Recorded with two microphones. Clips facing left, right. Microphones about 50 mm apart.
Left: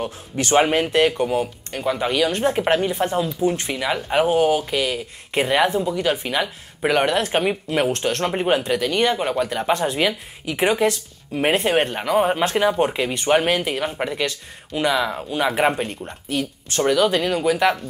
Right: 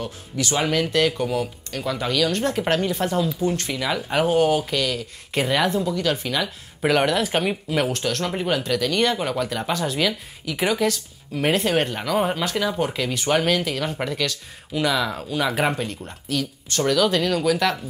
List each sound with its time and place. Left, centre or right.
0.0 s speech: left; by 4.7 s centre
4.7 s speech: left
6.8 s speech: centre
7.9 s speech: left
8.8 s speech: centre